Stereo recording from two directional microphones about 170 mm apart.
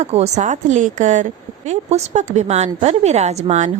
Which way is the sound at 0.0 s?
40° right (ahead or behind).